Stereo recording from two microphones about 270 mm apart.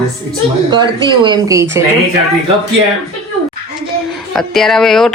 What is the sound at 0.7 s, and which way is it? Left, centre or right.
A woman's voice, centre.